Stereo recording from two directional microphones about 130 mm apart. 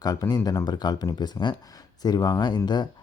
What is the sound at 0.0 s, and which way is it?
Speech, 30° left (ahead or behind).